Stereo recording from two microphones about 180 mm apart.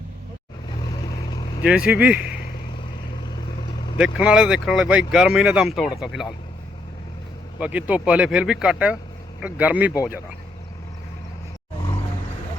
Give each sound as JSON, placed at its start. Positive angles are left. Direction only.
{"t": 1.3, "sound": "vehicle", "side_deg": 25}
{"t": 1.6, "sound": "speech", "side_deg": -5}
{"t": 3.9, "sound": "speech", "side_deg": -5}
{"t": 7.6, "sound": "speech", "side_deg": -10}